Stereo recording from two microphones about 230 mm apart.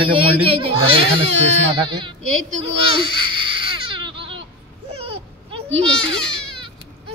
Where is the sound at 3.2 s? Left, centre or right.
Right.